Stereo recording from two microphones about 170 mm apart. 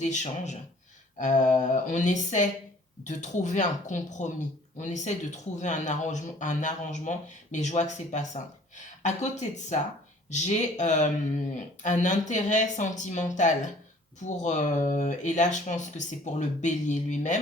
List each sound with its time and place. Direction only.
0.0 s speech: 45° left (ahead or behind)